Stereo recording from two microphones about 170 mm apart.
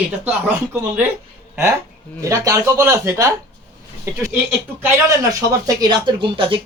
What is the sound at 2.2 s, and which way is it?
Speech, 20° right (ahead or behind).